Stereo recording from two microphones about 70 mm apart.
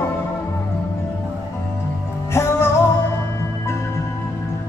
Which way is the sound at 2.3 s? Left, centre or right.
Left.